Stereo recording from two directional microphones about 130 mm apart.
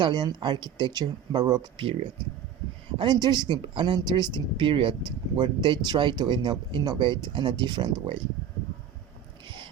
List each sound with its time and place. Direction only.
0.0 s speech: 35° right (ahead or behind)
3.0 s speech: 30° right (ahead or behind)